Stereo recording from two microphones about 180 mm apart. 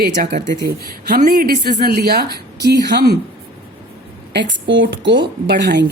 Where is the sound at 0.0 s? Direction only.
55° right (ahead or behind).